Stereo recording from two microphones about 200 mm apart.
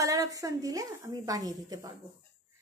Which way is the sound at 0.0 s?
15° right (ahead or behind).